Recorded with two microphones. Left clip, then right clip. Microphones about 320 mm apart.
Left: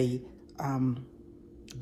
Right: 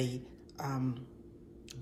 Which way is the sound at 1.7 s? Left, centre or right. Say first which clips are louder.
Left 4 dB; left.